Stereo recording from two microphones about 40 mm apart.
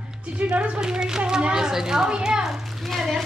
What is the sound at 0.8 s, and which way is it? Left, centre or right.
A child's voice, centre.